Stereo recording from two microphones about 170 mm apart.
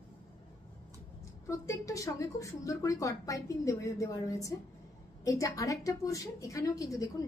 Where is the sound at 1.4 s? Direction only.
20° left (ahead or behind).